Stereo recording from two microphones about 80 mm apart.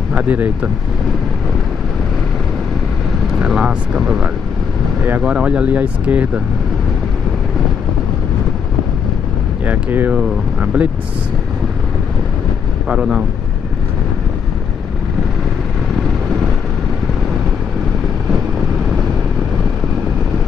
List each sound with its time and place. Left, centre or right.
0.1 s speech: centre
3.3 s speech: centre
9.7 s speech: right
12.8 s speech: centre